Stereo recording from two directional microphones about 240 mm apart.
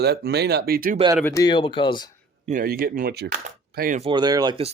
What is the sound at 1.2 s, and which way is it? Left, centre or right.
Speech, centre.